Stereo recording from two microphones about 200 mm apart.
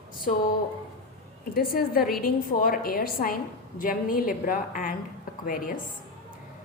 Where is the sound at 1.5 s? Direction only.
45° left (ahead or behind).